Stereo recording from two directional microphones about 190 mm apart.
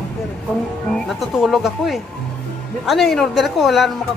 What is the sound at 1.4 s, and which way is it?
A woman's voice, centre (ahead or behind).